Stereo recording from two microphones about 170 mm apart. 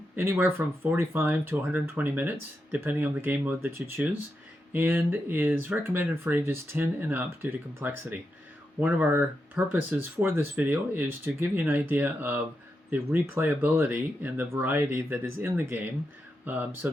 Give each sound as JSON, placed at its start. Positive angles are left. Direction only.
{"t": 0.2, "sound": "speech", "side_deg": -15}